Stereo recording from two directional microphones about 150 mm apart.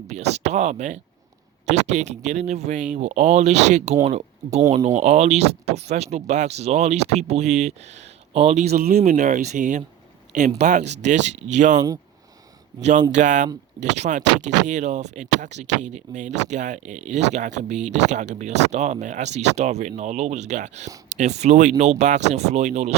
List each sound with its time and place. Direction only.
0.1 s speech: 45° right (ahead or behind)
12.8 s speech: 50° right (ahead or behind)